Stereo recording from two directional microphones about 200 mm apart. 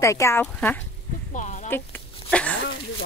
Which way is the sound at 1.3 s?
40° left (ahead or behind).